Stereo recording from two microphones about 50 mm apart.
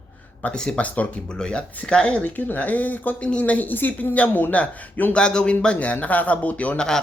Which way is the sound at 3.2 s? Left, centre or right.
Left.